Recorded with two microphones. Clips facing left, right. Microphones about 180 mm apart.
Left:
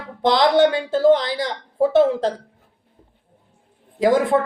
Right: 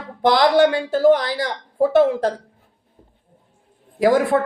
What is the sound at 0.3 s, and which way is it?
A man's voice, 25° left (ahead or behind).